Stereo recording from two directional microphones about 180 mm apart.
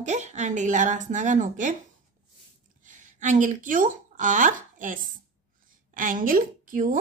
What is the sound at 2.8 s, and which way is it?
A woman's voice, 45° right (ahead or behind).